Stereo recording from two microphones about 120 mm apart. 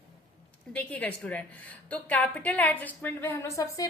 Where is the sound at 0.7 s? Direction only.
10° left (ahead or behind).